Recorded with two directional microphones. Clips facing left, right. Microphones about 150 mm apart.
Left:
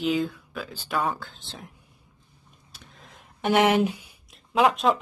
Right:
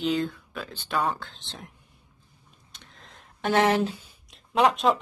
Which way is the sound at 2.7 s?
10° left (ahead or behind).